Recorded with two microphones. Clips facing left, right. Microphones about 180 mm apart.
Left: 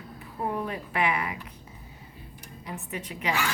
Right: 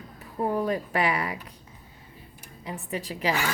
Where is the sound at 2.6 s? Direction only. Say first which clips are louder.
Right 4 dB; 35° right (ahead or behind).